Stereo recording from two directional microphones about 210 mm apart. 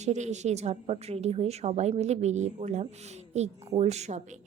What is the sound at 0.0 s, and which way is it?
A woman's voice, 35° right (ahead or behind).